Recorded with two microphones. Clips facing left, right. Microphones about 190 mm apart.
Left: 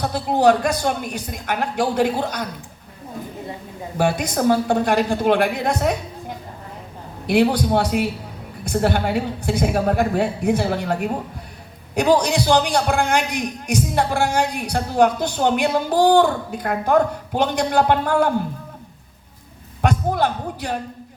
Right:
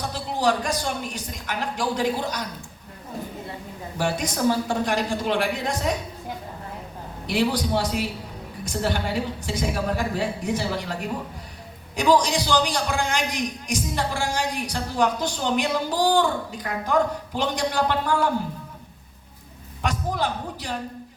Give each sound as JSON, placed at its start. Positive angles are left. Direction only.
{"t": 0.1, "sound": "a man's voice", "side_deg": 60}
{"t": 3.9, "sound": "a man's voice", "side_deg": 55}
{"t": 7.3, "sound": "a man's voice", "side_deg": 60}
{"t": 19.8, "sound": "speech", "side_deg": 55}